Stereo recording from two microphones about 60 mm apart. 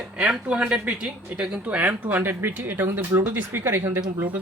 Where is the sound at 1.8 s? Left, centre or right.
Right.